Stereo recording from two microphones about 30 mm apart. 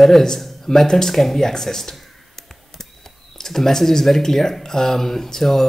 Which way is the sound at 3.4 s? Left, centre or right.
Centre.